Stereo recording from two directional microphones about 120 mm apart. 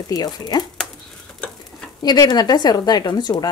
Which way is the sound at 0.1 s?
35° left (ahead or behind).